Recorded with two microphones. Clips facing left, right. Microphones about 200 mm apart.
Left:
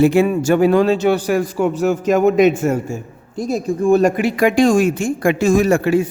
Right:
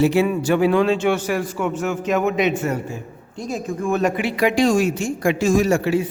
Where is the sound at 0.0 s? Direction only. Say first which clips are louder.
Left 4 dB; 50° left (ahead or behind).